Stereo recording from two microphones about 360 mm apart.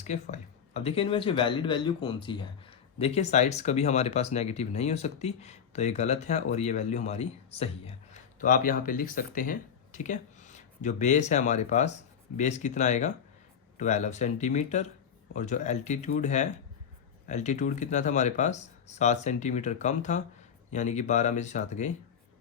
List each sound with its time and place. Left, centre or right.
0.0 s speech: centre